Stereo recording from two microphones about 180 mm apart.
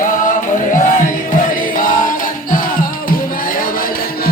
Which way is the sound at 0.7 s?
50° left (ahead or behind).